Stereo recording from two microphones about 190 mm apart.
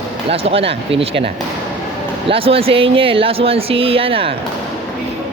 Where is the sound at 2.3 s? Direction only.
30° right (ahead or behind).